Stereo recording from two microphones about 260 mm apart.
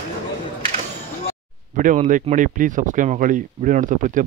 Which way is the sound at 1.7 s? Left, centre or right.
Right.